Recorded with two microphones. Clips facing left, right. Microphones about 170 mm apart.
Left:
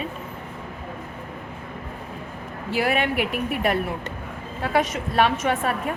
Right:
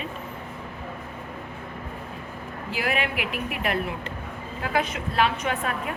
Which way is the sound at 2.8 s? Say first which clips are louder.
Left 5 dB; 40° left (ahead or behind).